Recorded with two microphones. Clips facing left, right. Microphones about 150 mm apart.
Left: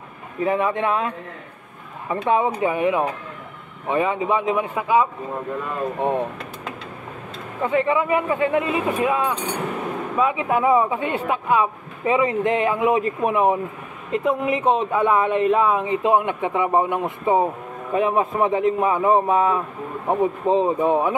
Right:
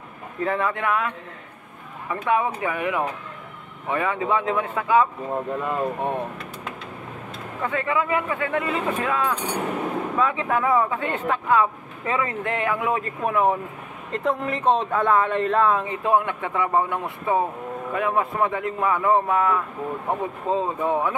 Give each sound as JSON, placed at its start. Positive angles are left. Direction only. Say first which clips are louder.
{"t": 0.4, "sound": "speech", "louder": "left 4 dB", "side_deg": 15}
{"t": 7.6, "sound": "speech", "louder": "left 5 dB", "side_deg": 20}